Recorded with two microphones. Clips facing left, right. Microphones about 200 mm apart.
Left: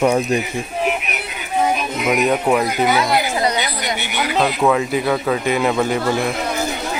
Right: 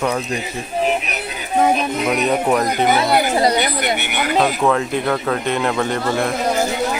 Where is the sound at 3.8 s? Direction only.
55° right (ahead or behind).